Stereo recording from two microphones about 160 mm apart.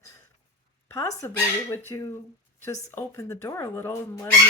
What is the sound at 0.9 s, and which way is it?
Speech, 15° left (ahead or behind).